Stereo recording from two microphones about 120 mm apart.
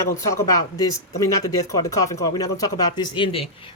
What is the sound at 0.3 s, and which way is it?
Speech, 30° left (ahead or behind).